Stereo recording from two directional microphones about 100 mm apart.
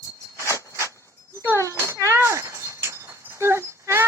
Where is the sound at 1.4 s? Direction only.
20° left (ahead or behind).